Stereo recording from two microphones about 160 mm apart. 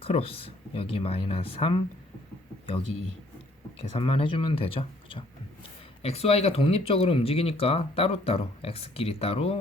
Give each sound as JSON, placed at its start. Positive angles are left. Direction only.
{"t": 0.0, "sound": "speech", "side_deg": 35}
{"t": 3.9, "sound": "speech", "side_deg": 35}